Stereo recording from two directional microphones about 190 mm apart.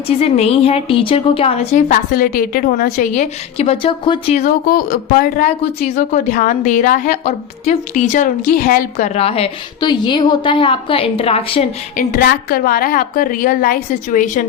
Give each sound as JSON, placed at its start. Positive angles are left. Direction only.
{"t": 0.2, "sound": "speech", "side_deg": 30}
{"t": 4.4, "sound": "speech", "side_deg": 45}
{"t": 11.9, "sound": "a woman's voice", "side_deg": 50}